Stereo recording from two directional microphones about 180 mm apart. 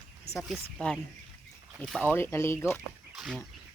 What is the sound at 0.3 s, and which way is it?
Speech, centre (ahead or behind).